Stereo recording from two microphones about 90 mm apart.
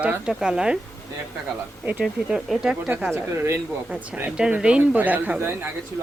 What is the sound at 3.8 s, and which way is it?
Speech, 10° right (ahead or behind).